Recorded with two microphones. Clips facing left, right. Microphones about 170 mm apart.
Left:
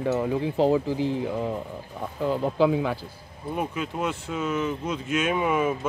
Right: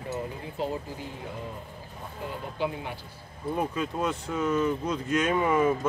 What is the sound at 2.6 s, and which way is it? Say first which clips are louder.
Speech: left 9 dB; 90° left.